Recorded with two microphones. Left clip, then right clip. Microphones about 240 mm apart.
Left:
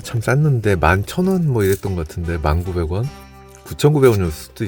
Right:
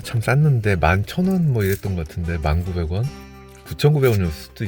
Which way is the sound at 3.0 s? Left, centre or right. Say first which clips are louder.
Left 2 dB; centre.